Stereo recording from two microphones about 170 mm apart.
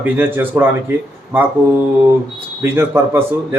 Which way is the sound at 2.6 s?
15° right (ahead or behind).